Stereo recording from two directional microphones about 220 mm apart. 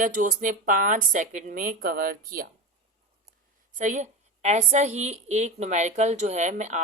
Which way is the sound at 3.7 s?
35° right (ahead or behind).